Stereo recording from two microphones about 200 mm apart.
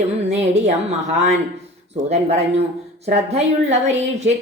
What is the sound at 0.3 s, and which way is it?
A woman's voice, 35° right (ahead or behind).